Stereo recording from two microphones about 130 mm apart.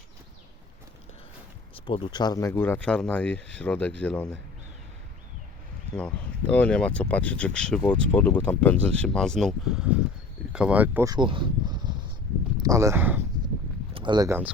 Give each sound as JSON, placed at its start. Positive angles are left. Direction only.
{"t": 1.7, "sound": "speech", "side_deg": 40}
{"t": 2.5, "sound": "speech", "side_deg": 15}
{"t": 6.5, "sound": "speech", "side_deg": 10}
{"t": 11.0, "sound": "speech", "side_deg": -35}
{"t": 13.9, "sound": "a sound", "side_deg": -35}
{"t": 14.3, "sound": "speech", "side_deg": -15}